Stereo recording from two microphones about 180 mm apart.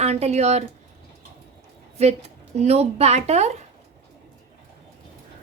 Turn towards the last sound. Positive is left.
turn(degrees=-40)  # may be behind; listen again after turning